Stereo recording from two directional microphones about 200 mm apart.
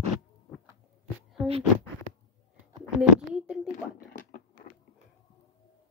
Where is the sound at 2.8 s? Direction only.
5° right (ahead or behind).